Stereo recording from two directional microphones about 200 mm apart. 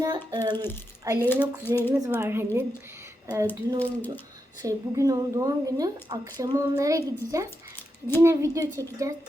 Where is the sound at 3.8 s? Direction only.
10° left (ahead or behind).